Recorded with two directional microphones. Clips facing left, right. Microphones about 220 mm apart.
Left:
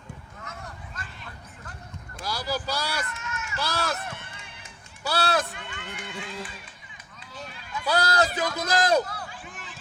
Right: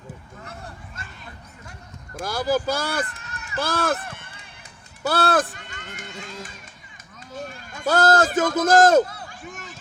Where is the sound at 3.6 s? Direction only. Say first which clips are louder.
Right 6 dB; 50° right (ahead or behind).